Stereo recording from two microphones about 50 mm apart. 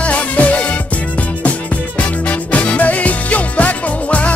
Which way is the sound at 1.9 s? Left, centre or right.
Left.